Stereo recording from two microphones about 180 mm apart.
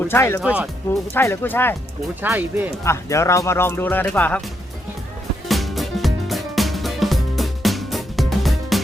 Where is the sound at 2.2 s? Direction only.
10° right (ahead or behind).